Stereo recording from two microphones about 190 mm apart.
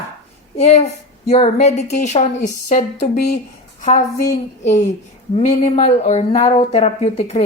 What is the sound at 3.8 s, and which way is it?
Speech, 40° left (ahead or behind).